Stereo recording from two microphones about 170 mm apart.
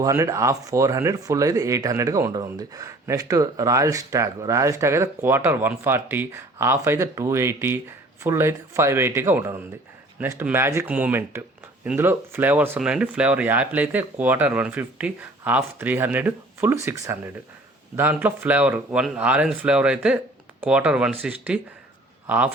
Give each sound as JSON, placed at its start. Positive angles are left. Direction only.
{"t": 0.0, "sound": "speech", "side_deg": -20}